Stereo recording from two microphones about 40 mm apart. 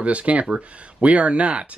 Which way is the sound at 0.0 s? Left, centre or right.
Right.